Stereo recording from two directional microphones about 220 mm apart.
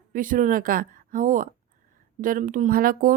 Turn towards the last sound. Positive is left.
turn(degrees=-40)  # may be behind; listen again after turning